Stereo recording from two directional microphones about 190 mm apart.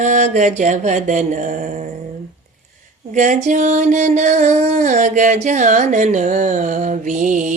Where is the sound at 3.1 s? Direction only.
40° right (ahead or behind).